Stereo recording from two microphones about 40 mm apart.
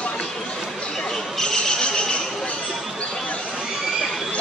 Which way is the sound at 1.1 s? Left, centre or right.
Centre.